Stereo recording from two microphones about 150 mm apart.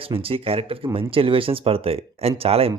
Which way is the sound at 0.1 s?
40° right (ahead or behind).